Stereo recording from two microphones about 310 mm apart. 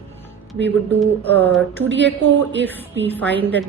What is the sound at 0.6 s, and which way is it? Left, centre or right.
Speech, right.